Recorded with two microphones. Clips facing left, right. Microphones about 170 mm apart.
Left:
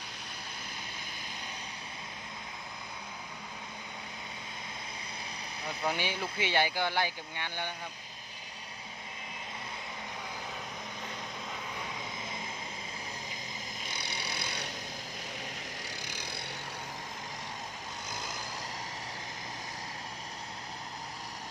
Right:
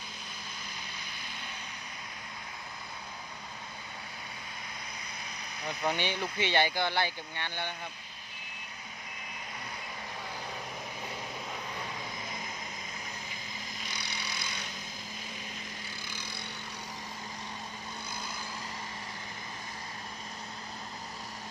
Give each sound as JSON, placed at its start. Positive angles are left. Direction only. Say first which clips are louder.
{"t": 5.6, "sound": "speech", "louder": "right 2 dB", "side_deg": 5}
{"t": 13.8, "sound": "vehicle", "louder": "left 2 dB", "side_deg": 55}
{"t": 15.9, "sound": "vehicle", "louder": "left 1 dB", "side_deg": 75}